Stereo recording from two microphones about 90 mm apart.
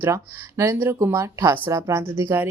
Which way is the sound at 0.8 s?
25° right (ahead or behind).